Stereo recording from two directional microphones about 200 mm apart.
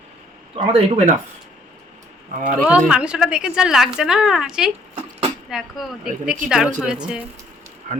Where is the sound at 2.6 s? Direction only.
5° right (ahead or behind).